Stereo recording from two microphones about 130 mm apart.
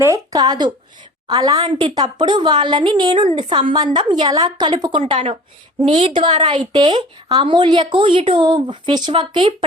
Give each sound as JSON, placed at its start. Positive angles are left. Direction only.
{"t": 0.0, "sound": "a woman's voice", "side_deg": -25}